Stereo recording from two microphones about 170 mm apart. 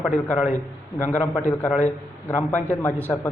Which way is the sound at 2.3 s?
15° left (ahead or behind).